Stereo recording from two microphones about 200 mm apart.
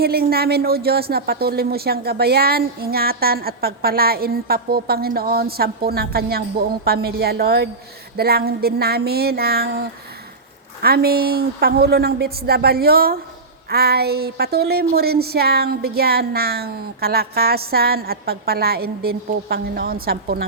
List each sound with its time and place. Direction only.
0.0 s speech: 50° right (ahead or behind)
10.8 s speech: 50° right (ahead or behind)